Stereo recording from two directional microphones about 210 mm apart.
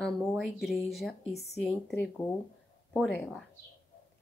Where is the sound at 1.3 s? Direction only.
50° left (ahead or behind).